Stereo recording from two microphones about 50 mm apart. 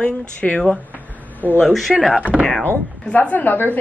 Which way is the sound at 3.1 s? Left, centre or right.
Left.